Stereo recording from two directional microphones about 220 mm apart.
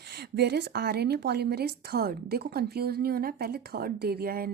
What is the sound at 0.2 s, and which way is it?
A woman's voice, 50° right (ahead or behind).